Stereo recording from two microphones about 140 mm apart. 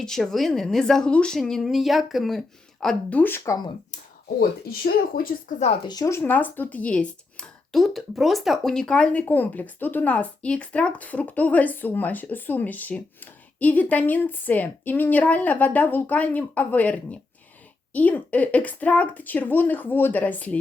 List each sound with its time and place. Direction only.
0.0 s speech: centre (ahead or behind)
2.8 s speech: 10° left (ahead or behind)
4.4 s speech: 90° left
5.9 s speech: 25° left (ahead or behind)